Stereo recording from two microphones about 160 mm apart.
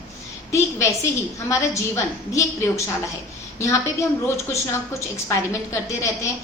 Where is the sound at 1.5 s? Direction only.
20° left (ahead or behind).